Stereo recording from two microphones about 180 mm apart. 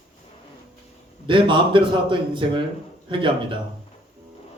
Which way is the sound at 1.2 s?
25° right (ahead or behind).